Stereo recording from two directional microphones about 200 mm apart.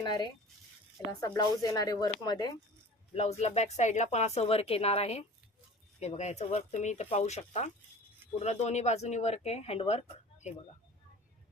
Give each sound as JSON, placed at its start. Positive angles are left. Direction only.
{"t": 0.0, "sound": "speech", "side_deg": 20}
{"t": 1.3, "sound": "speech", "side_deg": 20}
{"t": 3.2, "sound": "a woman's voice", "side_deg": 35}